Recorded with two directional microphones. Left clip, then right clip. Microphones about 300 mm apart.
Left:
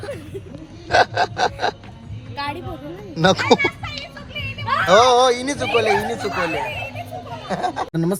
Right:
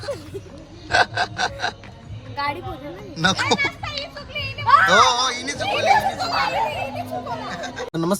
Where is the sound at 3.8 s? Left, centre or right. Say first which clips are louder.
Right 2 dB; right.